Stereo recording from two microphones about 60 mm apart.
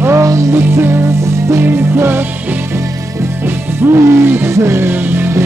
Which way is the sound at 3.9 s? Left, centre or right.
Right.